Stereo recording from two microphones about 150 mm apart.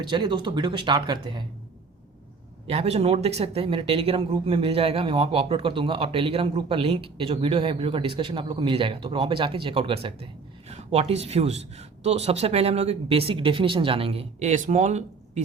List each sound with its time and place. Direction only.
0.0 s speech: 30° right (ahead or behind)
2.6 s speech: 45° right (ahead or behind)